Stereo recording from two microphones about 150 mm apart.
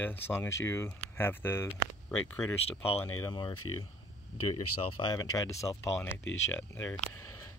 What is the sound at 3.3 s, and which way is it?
Speech, 25° left (ahead or behind).